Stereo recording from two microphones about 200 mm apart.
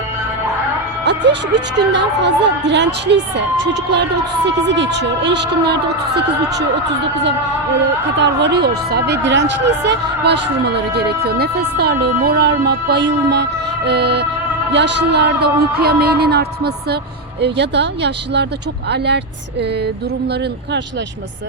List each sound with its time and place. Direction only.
1.0 s speech: 60° right (ahead or behind)
4.4 s speech: 60° right (ahead or behind)
8.2 s speech: 60° right (ahead or behind)